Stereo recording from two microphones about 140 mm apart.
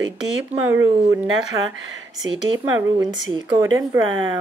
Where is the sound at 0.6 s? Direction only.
20° right (ahead or behind).